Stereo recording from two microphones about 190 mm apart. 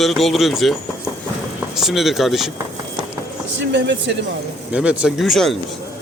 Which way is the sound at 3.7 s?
70° right (ahead or behind).